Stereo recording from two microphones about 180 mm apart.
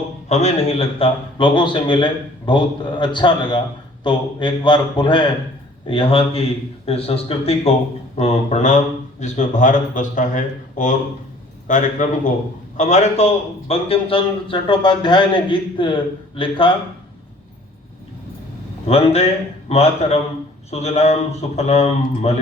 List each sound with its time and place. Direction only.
0.3 s a man's voice: 40° left (ahead or behind)
18.9 s a man's voice: 35° left (ahead or behind)